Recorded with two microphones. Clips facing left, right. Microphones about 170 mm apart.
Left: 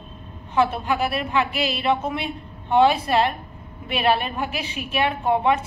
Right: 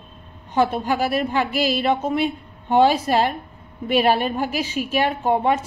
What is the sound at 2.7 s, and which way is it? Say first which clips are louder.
A woman's voice: right 1 dB; 40° right (ahead or behind).